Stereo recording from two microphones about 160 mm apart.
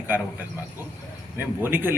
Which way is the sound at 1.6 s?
10° right (ahead or behind).